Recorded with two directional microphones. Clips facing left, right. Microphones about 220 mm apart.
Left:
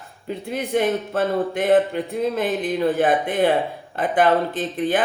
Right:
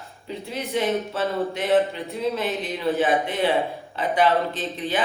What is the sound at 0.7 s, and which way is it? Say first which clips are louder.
A man's voice: left 3 dB; 50° left (ahead or behind).